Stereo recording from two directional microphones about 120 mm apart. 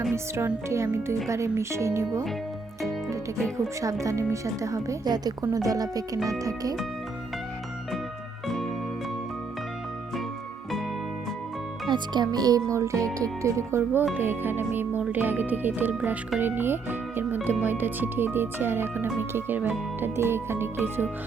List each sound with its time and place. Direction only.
0.1 s speech: 20° right (ahead or behind)
3.8 s speech: 25° right (ahead or behind)
8.4 s music: centre (ahead or behind)
11.9 s speech: 40° right (ahead or behind); by 21.1 s 20° right (ahead or behind)